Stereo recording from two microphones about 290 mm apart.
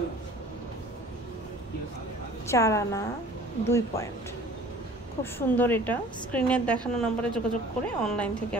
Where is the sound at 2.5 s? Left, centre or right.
Centre.